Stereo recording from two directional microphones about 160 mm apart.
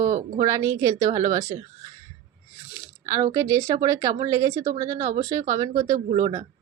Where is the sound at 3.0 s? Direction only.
20° right (ahead or behind).